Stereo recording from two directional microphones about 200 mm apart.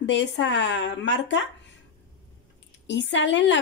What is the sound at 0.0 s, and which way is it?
Speech, 65° left (ahead or behind).